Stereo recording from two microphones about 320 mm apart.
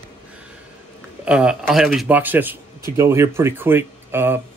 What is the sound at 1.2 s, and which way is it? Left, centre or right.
A man's voice, centre.